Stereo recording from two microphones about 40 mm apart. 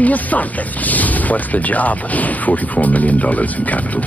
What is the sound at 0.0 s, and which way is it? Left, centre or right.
Speech, left.